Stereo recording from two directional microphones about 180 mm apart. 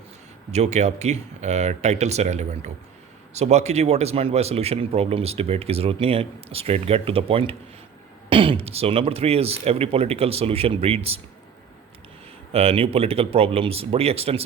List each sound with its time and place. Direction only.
0.5 s speech: 40° right (ahead or behind)
12.5 s speech: 30° right (ahead or behind)